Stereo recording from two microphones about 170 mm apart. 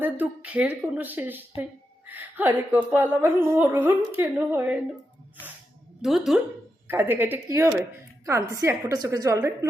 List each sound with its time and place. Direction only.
0.0 s speech: 10° right (ahead or behind)
6.0 s a woman's voice: centre (ahead or behind); by 9.6 s 20° right (ahead or behind)